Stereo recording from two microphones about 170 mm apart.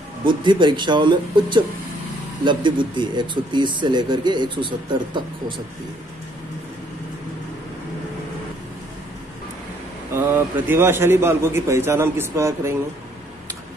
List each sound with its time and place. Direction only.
0.2 s speech: 30° right (ahead or behind)
10.1 s a man's voice: 15° right (ahead or behind)